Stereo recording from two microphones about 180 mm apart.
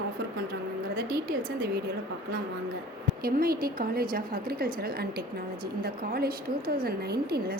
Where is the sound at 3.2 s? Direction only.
55° right (ahead or behind).